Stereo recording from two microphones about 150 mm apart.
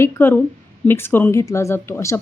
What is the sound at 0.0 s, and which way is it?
Speech, 15° left (ahead or behind).